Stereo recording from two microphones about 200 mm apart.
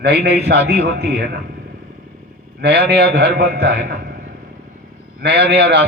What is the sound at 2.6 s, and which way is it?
A man's voice, 55° right (ahead or behind).